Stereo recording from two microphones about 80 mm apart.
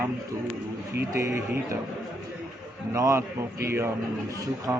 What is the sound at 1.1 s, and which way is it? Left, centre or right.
Speech, right.